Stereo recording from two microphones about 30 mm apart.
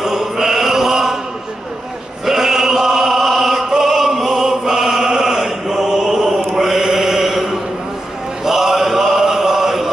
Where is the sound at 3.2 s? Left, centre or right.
Centre.